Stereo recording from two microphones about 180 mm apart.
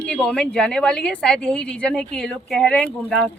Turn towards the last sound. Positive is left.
turn(degrees=5)  # may be behind; listen again after turning